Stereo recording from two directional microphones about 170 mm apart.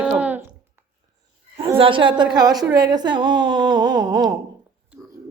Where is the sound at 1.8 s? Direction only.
30° right (ahead or behind).